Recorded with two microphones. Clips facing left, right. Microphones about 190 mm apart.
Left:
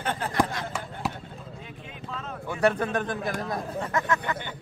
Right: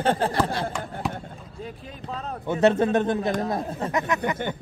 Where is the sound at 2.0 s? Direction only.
40° right (ahead or behind).